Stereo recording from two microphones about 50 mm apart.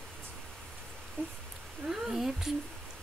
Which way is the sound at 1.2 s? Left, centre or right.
Right.